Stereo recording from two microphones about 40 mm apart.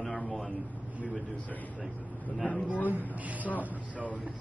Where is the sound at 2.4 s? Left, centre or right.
Left.